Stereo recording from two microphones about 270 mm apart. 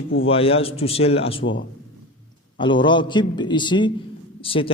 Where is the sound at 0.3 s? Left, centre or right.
Left.